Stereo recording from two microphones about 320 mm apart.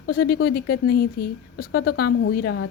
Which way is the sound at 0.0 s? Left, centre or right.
Left.